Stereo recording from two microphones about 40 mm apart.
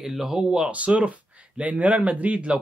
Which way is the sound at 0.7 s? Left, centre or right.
Right.